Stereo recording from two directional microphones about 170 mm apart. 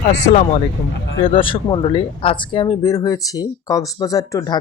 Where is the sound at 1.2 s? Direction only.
30° left (ahead or behind).